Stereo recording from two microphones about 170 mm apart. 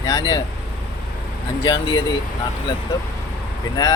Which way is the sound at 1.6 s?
20° left (ahead or behind).